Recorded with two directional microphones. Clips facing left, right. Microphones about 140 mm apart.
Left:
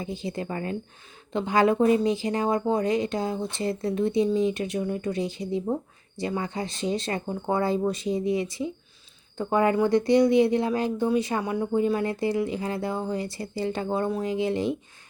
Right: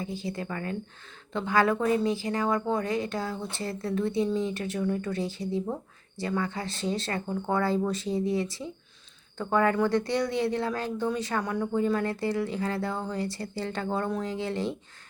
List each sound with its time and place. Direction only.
0.0 s speech: 20° left (ahead or behind)